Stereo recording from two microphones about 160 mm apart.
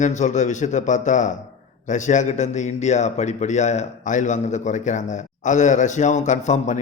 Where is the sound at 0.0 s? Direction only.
50° left (ahead or behind).